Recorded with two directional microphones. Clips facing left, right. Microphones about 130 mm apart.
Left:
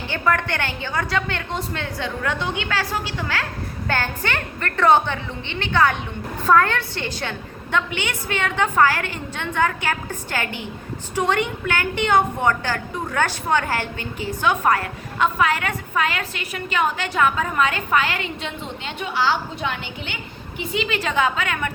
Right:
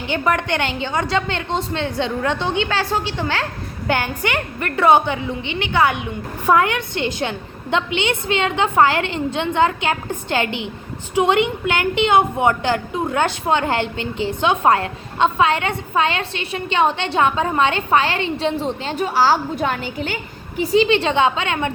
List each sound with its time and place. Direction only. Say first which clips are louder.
0.1 s a woman's voice: right 3 dB; 20° right (ahead or behind)
3.8 s a woman's voice: right 4 dB; 15° right (ahead or behind); by 20.1 s 40° right (ahead or behind)
20.6 s a woman's voice: right 9 dB; 30° right (ahead or behind)